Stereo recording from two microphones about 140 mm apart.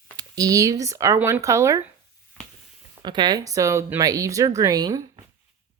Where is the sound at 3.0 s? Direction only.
30° right (ahead or behind).